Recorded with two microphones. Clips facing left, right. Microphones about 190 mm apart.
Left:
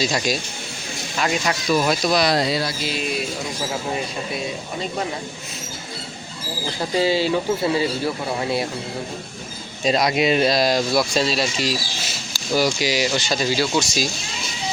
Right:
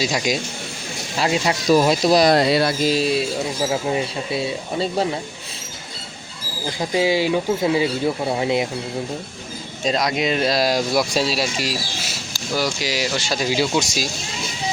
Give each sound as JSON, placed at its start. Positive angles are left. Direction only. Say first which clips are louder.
{"t": 0.0, "sound": "speech", "louder": "right 1 dB", "side_deg": -10}
{"t": 1.1, "sound": "speech", "louder": "right 2 dB", "side_deg": -30}
{"t": 2.3, "sound": "music", "louder": "right 5 dB", "side_deg": -60}
{"t": 2.8, "sound": "speech", "louder": "right 7 dB", "side_deg": -35}
{"t": 6.7, "sound": "speech", "louder": "right 1 dB", "side_deg": -15}
{"t": 9.8, "sound": "speech", "louder": "left 2 dB", "side_deg": 5}
{"t": 10.5, "sound": "speech", "louder": "even", "side_deg": -5}